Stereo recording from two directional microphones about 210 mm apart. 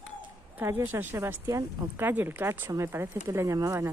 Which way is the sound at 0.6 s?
10° right (ahead or behind).